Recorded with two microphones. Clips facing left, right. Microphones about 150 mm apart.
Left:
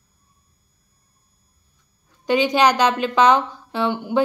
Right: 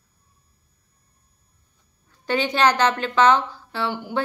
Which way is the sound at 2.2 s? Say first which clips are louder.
Left 3 dB; 15° left (ahead or behind).